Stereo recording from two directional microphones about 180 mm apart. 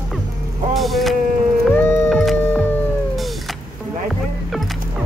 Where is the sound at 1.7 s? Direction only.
10° left (ahead or behind).